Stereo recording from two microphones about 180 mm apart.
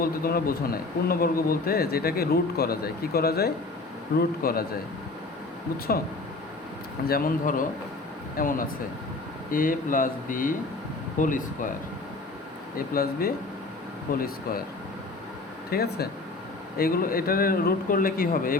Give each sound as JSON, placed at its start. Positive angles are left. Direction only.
{"t": 0.0, "sound": "speech", "side_deg": 55}
{"t": 7.1, "sound": "speech", "side_deg": 50}
{"t": 12.7, "sound": "speech", "side_deg": 55}
{"t": 15.7, "sound": "speech", "side_deg": 60}